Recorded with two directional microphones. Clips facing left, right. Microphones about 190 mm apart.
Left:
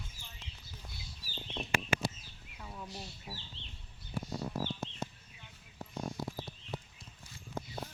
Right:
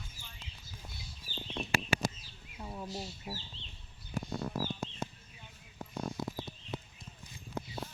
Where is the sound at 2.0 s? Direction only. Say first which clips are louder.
Right 2 dB; 45° right (ahead or behind).